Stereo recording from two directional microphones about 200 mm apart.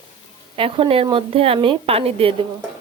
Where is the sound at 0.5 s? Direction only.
25° right (ahead or behind).